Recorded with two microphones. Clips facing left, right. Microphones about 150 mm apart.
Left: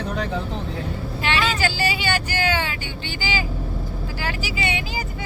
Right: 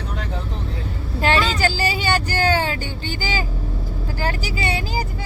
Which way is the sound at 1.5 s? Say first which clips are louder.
Right 2 dB; 40° right (ahead or behind).